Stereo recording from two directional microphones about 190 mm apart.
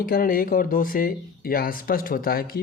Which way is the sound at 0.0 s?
50° left (ahead or behind).